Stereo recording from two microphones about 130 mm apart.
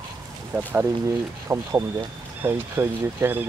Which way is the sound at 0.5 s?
15° right (ahead or behind).